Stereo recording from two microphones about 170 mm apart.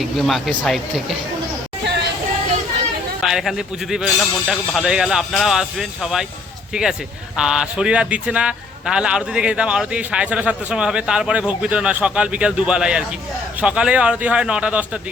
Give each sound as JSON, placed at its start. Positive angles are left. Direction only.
{"t": 0.0, "sound": "a man's voice", "side_deg": 0}
{"t": 3.2, "sound": "a man's voice", "side_deg": 0}
{"t": 7.3, "sound": "a man's voice", "side_deg": -5}